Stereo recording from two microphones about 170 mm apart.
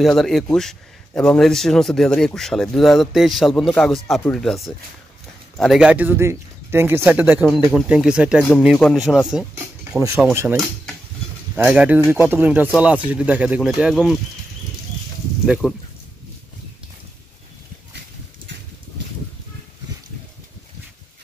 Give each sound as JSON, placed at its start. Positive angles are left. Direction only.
{"t": 0.0, "sound": "speech", "side_deg": 0}
{"t": 9.9, "sound": "speech", "side_deg": -20}
{"t": 11.5, "sound": "speech", "side_deg": -10}
{"t": 15.4, "sound": "speech", "side_deg": -5}